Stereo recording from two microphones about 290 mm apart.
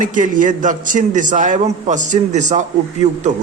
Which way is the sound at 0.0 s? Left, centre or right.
Right.